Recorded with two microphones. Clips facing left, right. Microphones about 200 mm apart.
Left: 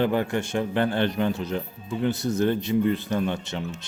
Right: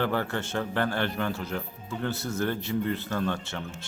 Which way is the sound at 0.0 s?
15° left (ahead or behind).